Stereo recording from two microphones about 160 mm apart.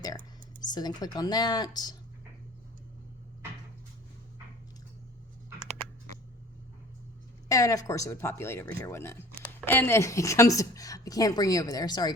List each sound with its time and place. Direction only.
0.6 s speech: 25° left (ahead or behind)
7.4 s speech: 20° left (ahead or behind)